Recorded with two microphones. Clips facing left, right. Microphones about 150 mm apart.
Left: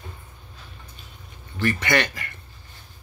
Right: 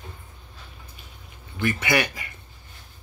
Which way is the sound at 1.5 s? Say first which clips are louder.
Left 1 dB; 10° right (ahead or behind).